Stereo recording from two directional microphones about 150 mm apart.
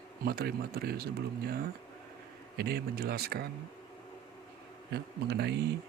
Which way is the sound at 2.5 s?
90° right.